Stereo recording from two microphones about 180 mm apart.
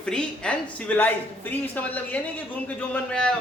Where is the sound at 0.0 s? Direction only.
5° left (ahead or behind).